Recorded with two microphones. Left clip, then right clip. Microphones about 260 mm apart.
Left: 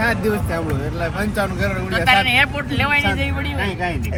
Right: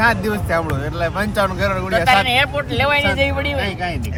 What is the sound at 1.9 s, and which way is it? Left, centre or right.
Speech, right.